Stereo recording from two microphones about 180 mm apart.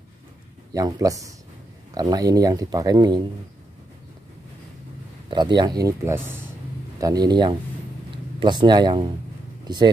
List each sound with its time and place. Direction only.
0.7 s speech: 20° right (ahead or behind)
5.3 s speech: 25° right (ahead or behind)